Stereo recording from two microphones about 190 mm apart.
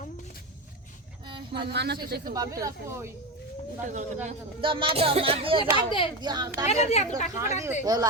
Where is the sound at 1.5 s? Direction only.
60° right (ahead or behind).